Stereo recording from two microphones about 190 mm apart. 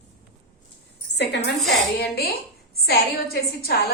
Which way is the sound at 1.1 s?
65° left (ahead or behind).